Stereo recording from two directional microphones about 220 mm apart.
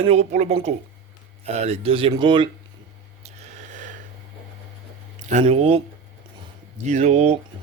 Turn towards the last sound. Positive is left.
turn(degrees=-30)  # may be behind; listen again after turning